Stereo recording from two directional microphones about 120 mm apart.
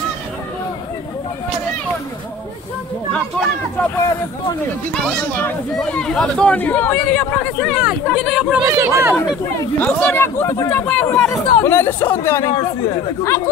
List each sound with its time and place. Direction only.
5.8 s speech: 5° left (ahead or behind)
7.8 s speech: centre (ahead or behind)
8.6 s speech: 20° right (ahead or behind)
9.8 s speech: 15° left (ahead or behind)